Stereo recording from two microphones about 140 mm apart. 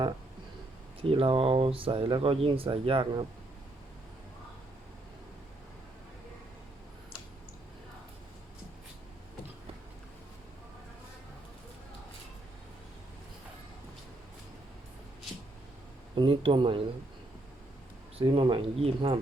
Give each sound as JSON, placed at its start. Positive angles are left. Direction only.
{"t": 1.0, "sound": "speech", "side_deg": -40}
{"t": 16.1, "sound": "speech", "side_deg": -35}
{"t": 18.2, "sound": "speech", "side_deg": -35}